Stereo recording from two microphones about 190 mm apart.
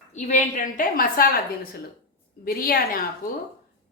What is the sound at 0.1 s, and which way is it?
A woman's voice, 40° left (ahead or behind).